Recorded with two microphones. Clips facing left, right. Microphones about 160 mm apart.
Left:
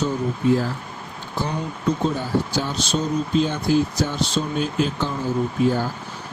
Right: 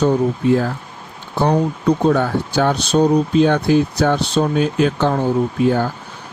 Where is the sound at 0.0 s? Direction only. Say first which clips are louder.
Right 6 dB; 65° right (ahead or behind).